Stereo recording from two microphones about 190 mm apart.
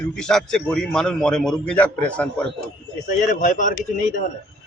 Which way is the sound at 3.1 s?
40° left (ahead or behind).